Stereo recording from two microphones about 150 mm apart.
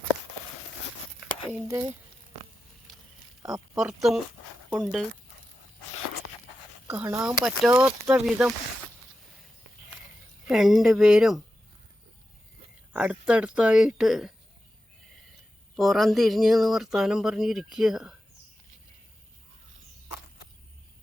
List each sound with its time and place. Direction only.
1.5 s speech: 20° right (ahead or behind)
3.8 s speech: 5° right (ahead or behind)
6.8 s speech: 10° right (ahead or behind)
10.5 s speech: centre (ahead or behind)
12.9 s speech: 5° right (ahead or behind)
15.7 s speech: centre (ahead or behind)